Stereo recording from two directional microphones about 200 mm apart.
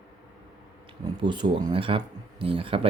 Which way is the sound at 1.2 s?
25° right (ahead or behind).